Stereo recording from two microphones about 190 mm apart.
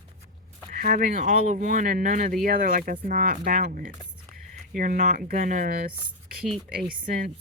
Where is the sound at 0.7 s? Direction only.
45° right (ahead or behind).